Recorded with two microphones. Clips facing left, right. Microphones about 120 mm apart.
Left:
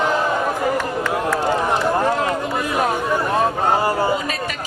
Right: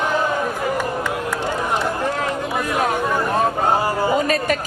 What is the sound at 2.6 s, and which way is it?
Chatter, 10° left (ahead or behind).